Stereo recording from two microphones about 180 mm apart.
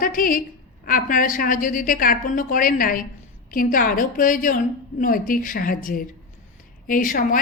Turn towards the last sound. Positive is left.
turn(degrees=50)  # may be behind; listen again after turning